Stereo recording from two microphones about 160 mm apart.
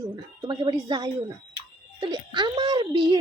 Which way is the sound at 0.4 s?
30° right (ahead or behind).